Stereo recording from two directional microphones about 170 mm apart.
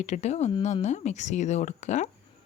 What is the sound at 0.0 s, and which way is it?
Speech, 45° left (ahead or behind).